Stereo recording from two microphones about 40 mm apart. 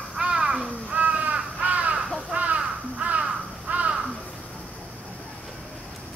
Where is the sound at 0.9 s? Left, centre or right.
Right.